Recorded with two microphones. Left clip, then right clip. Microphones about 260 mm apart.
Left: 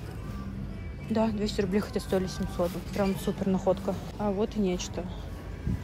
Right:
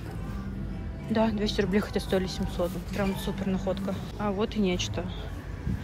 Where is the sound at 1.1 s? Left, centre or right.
Centre.